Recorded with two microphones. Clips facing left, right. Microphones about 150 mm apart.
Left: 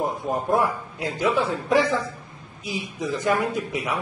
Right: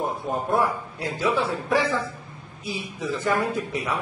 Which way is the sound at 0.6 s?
15° left (ahead or behind).